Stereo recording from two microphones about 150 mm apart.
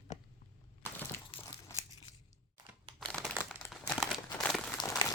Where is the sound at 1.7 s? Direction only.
20° left (ahead or behind).